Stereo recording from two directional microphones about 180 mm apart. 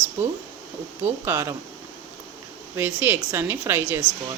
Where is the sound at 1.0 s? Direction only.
15° right (ahead or behind).